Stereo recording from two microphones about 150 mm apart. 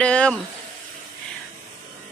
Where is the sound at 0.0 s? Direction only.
5° left (ahead or behind).